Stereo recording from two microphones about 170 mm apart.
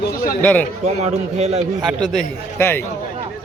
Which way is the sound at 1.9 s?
5° right (ahead or behind).